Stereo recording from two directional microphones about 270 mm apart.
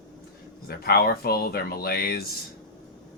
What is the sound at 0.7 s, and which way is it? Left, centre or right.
Speech, left.